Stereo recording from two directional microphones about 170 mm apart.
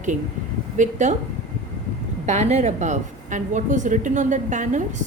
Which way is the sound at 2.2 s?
40° right (ahead or behind).